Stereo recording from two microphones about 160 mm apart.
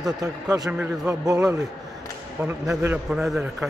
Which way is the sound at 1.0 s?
20° right (ahead or behind).